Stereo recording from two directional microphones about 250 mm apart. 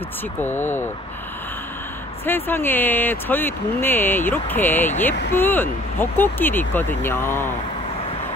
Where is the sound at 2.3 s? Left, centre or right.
Centre.